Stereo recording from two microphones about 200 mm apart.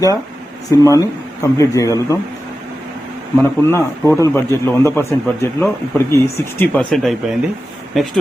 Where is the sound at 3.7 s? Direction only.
15° left (ahead or behind).